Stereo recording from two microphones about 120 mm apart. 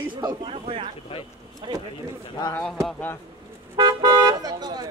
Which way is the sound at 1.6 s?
45° right (ahead or behind).